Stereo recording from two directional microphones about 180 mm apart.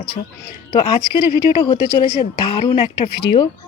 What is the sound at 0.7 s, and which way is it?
Speech, 25° left (ahead or behind).